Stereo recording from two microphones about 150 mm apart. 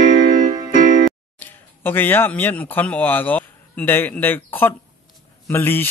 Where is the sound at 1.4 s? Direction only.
10° left (ahead or behind).